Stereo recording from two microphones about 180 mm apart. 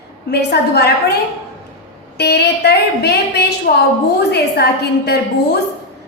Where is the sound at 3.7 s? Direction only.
55° left (ahead or behind).